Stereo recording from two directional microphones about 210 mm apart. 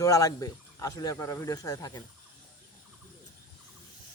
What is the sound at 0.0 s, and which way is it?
Speech, 15° left (ahead or behind).